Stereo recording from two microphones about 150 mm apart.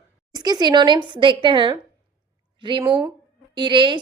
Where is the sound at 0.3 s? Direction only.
25° right (ahead or behind).